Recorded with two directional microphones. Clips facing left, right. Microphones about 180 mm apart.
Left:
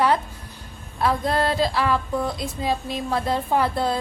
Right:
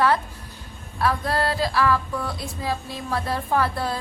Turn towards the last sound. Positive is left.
turn(degrees=20)  # may be behind; listen again after turning